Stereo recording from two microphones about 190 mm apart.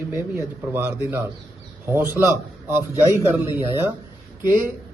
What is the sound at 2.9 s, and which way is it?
A man's voice, 15° left (ahead or behind).